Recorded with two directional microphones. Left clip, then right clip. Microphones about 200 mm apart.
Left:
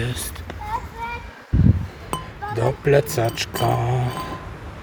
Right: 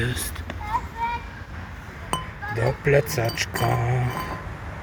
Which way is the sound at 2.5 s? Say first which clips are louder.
Left 3 dB; 20° left (ahead or behind).